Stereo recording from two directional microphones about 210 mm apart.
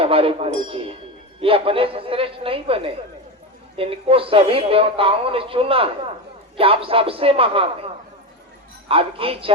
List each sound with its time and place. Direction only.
0.0 s a man's voice: 25° right (ahead or behind)
8.9 s a man's voice: 25° right (ahead or behind)